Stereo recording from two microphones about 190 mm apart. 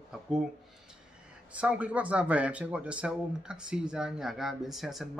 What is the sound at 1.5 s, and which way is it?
Speech, 5° right (ahead or behind).